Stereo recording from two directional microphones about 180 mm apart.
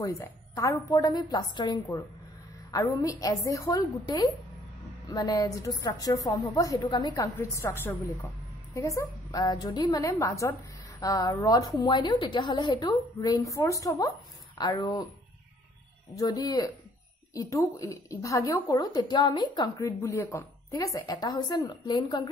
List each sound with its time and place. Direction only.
0.0 s a woman's voice: 15° left (ahead or behind)
16.1 s speech: 20° left (ahead or behind)